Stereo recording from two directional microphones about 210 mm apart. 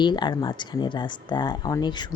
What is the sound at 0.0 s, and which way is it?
Speech, 20° left (ahead or behind).